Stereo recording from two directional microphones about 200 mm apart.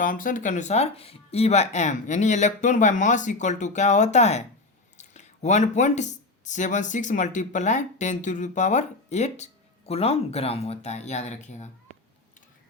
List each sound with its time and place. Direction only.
0.0 s speech: 40° left (ahead or behind)